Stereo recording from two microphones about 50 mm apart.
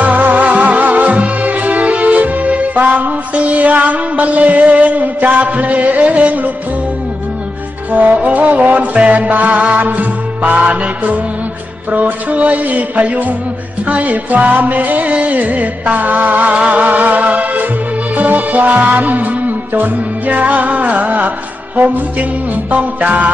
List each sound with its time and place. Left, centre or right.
0.0 s music: right
7.9 s music: right
22.7 s music: right